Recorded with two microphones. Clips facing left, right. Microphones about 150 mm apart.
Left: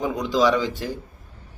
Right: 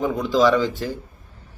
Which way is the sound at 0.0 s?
15° left (ahead or behind).